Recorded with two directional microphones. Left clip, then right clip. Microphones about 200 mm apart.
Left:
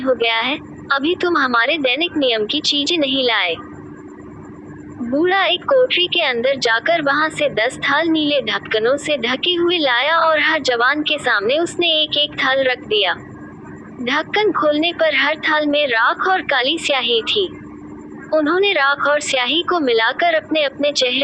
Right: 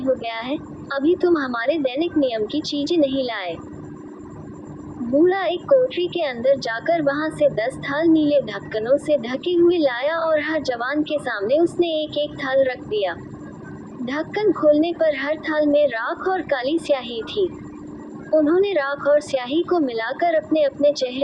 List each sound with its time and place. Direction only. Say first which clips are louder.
0.2 s a woman's voice: left 9 dB; 30° left (ahead or behind)
5.1 s a woman's voice: left 3 dB; 30° left (ahead or behind)